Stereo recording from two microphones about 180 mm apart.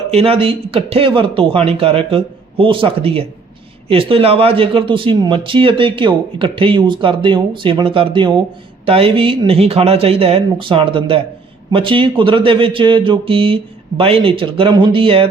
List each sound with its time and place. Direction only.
0.1 s a man's voice: 30° right (ahead or behind)